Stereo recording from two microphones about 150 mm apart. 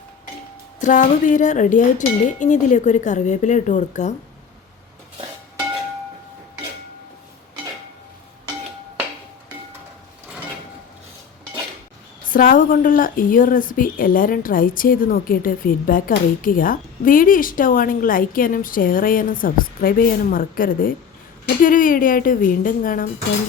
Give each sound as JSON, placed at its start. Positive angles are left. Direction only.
{"t": 0.8, "sound": "speech", "side_deg": 55}
{"t": 12.3, "sound": "a woman's voice", "side_deg": 65}